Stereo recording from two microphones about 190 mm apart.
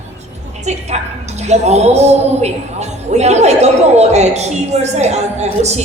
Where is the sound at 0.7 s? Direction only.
35° right (ahead or behind).